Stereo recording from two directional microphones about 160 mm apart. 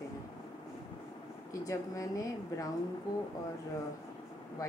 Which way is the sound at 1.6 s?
20° left (ahead or behind).